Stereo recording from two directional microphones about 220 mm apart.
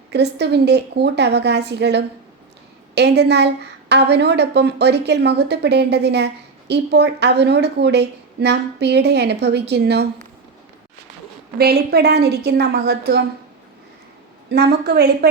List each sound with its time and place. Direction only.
0.1 s a woman's voice: 50° right (ahead or behind)
11.5 s a woman's voice: 45° right (ahead or behind)
14.5 s a woman's voice: 50° right (ahead or behind)